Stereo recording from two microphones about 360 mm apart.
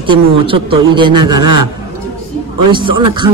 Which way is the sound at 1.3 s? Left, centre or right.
Right.